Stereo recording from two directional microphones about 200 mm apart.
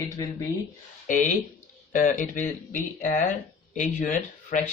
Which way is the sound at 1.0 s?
40° left (ahead or behind).